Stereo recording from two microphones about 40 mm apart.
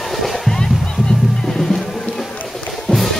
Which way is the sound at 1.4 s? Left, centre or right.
Centre.